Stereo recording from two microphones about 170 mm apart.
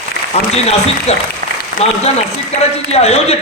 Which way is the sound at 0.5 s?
40° left (ahead or behind).